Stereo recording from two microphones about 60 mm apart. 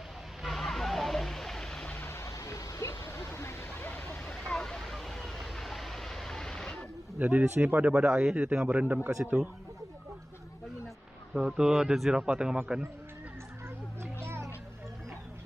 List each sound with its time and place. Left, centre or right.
0.4 s vehicle: centre
2.0 s a sound: left
3.7 s vehicle: left
4.3 s vehicle: centre
7.2 s speech: right
7.9 s speech: centre
9.2 s speech: centre
11.3 s speech: centre
12.2 s speech: centre
14.2 s music: right